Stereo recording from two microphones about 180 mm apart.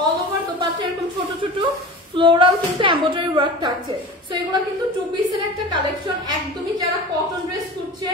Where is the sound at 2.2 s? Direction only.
25° right (ahead or behind).